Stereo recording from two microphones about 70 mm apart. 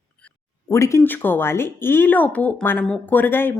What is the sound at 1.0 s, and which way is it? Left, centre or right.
Speech, left.